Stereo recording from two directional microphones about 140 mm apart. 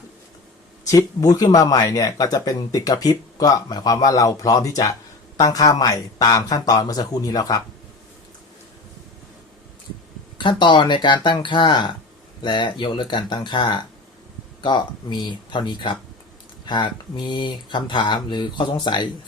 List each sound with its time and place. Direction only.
0.9 s speech: 25° left (ahead or behind)
10.3 s speech: 35° left (ahead or behind)